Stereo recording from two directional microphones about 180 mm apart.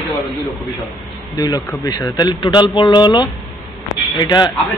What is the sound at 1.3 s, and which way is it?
A man's voice, 20° left (ahead or behind).